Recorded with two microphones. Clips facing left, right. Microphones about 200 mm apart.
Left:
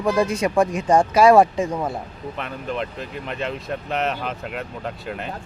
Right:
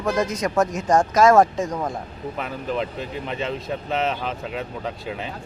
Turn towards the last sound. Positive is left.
turn(degrees=0)  # may be behind; listen again after turning